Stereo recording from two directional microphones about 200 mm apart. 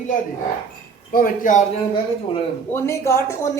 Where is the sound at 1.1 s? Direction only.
45° left (ahead or behind).